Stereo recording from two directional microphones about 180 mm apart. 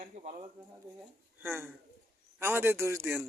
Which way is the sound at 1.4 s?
10° right (ahead or behind).